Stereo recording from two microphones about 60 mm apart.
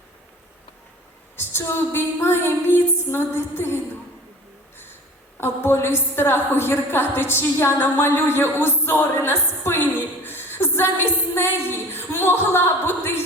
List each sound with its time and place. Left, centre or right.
1.4 s a woman's voice: left
5.4 s a woman's voice: left
10.2 s a sound: left